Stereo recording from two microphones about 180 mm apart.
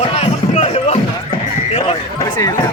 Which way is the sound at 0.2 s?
35° left (ahead or behind).